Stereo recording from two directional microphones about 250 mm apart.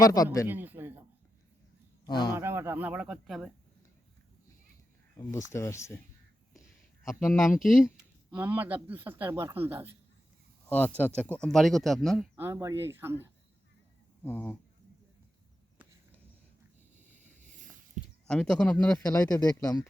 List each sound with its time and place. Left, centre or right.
0.0 s speech: centre
0.4 s a sound: centre
2.0 s speech: centre
2.3 s speech: centre
5.1 s speech: centre
7.2 s speech: centre
10.7 s speech: centre
12.4 s speech: centre
14.3 s speech: centre
18.3 s speech: centre